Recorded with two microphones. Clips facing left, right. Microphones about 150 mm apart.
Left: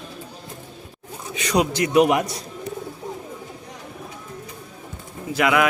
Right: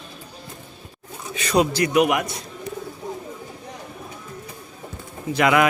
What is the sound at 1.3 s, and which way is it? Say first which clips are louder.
A man's voice: right 1 dB; 15° left (ahead or behind).